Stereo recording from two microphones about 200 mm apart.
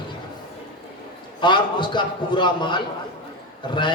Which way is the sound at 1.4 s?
25° left (ahead or behind).